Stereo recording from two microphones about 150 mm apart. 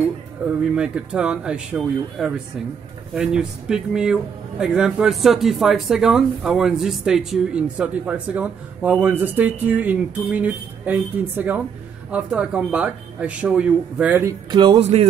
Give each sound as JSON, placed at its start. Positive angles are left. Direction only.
{"t": 0.7, "sound": "speech", "side_deg": -5}
{"t": 14.5, "sound": "speech", "side_deg": -30}
{"t": 14.8, "sound": "speech", "side_deg": -45}